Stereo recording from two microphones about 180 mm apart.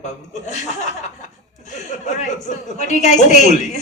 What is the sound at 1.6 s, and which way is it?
Speech, 40° left (ahead or behind).